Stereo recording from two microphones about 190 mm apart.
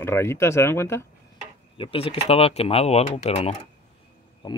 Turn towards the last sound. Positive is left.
turn(degrees=25)  # may be behind; listen again after turning